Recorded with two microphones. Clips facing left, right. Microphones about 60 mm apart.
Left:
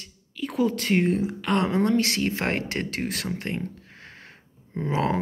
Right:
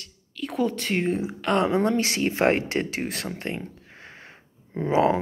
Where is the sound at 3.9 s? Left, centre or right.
Centre.